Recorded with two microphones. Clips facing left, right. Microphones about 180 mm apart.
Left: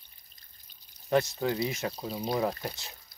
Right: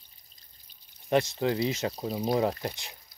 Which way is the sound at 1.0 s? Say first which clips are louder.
Right 1 dB; 20° right (ahead or behind).